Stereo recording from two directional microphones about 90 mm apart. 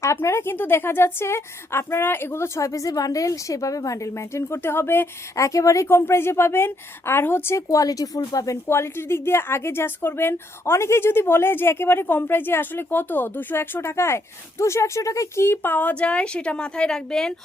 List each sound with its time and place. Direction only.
0.0 s a woman's voice: 30° left (ahead or behind)
5.5 s a woman's voice: 35° left (ahead or behind)
7.7 s speech: 40° left (ahead or behind)
8.6 s a woman's voice: 30° left (ahead or behind); by 17.3 s 10° left (ahead or behind)